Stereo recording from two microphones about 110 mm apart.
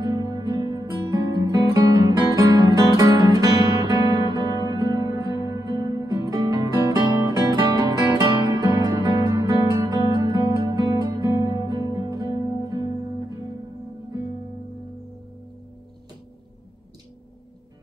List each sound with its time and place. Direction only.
0.0 s music: 35° right (ahead or behind)
5.3 s music: 45° left (ahead or behind)
5.6 s music: 35° right (ahead or behind)
10.8 s music: 40° right (ahead or behind)
11.8 s music: 50° left (ahead or behind)
12.1 s music: 35° right (ahead or behind)